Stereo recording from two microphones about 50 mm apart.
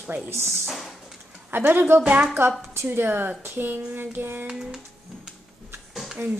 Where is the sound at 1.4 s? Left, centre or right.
Right.